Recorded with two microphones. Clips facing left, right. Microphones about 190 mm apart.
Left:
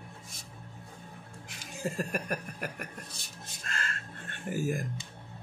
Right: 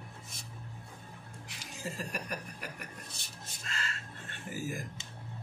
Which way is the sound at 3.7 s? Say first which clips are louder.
Left 3 dB; 50° left (ahead or behind).